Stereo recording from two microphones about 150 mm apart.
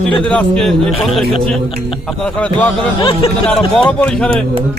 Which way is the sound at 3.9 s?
5° left (ahead or behind).